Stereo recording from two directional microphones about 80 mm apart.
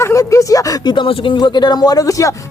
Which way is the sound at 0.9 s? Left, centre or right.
Left.